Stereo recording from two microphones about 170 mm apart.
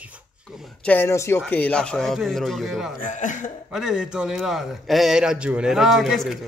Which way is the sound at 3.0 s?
50° left (ahead or behind).